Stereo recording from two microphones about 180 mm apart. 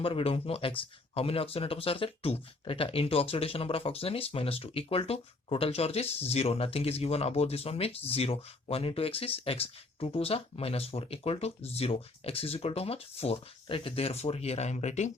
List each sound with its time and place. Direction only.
0.0 s speech: 30° left (ahead or behind)